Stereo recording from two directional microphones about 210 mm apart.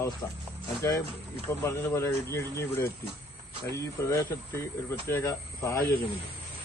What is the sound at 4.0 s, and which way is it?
Speech, 10° left (ahead or behind).